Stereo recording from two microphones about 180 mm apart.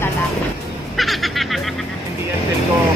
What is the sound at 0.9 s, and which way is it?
Music, centre (ahead or behind).